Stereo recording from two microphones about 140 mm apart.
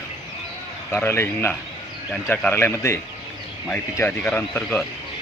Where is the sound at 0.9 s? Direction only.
15° left (ahead or behind).